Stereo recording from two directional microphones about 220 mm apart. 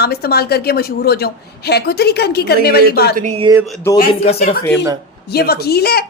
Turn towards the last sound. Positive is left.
turn(degrees=45)  # may be behind; listen again after turning